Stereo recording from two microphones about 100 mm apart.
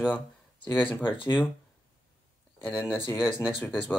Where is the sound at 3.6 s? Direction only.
20° left (ahead or behind).